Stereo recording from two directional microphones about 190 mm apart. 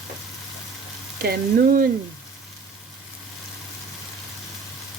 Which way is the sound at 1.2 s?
50° right (ahead or behind).